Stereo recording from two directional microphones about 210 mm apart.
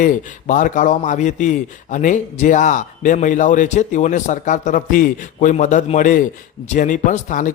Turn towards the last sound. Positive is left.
turn(degrees=35)  # may be behind; listen again after turning